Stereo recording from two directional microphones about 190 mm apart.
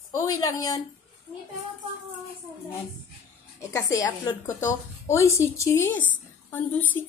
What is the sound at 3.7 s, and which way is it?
A woman's voice, 15° left (ahead or behind).